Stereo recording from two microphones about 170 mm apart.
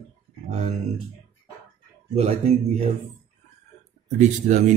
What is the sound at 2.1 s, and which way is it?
Speech, 35° right (ahead or behind).